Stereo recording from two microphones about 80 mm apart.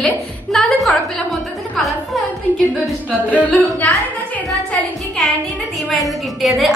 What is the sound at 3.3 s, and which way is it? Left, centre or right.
Speech, centre.